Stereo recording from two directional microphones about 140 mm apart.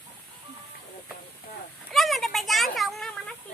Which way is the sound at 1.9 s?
Centre (ahead or behind).